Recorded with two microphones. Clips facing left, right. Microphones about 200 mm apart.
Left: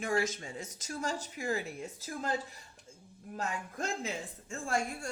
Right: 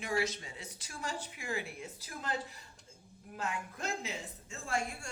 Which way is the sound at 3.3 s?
45° left (ahead or behind).